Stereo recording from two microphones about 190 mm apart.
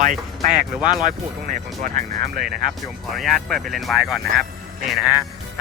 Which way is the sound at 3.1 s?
Centre (ahead or behind).